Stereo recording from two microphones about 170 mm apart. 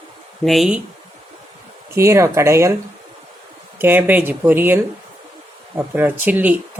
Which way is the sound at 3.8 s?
10° right (ahead or behind).